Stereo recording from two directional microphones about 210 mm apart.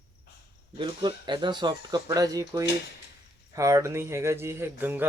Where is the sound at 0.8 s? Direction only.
20° right (ahead or behind).